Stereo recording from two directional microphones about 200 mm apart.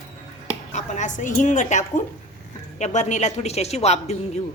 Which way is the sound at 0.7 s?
35° left (ahead or behind).